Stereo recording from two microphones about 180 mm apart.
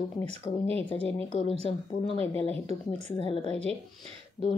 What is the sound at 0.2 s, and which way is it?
Speech, 35° right (ahead or behind).